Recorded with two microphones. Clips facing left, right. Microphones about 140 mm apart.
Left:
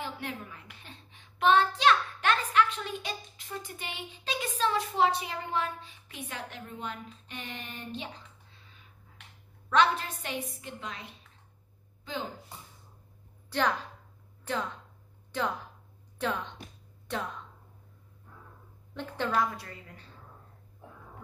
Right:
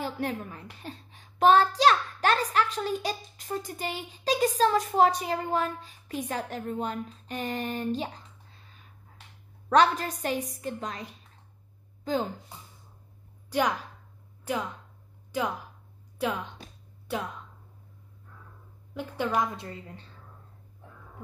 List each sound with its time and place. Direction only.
0.0 s a child's voice: 40° right (ahead or behind)
9.7 s speech: 40° right (ahead or behind)
13.5 s a woman's voice: 10° right (ahead or behind)
18.9 s a woman's voice: 10° right (ahead or behind)